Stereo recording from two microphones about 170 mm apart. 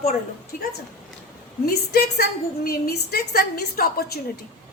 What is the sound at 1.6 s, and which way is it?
A woman's voice, 65° left (ahead or behind).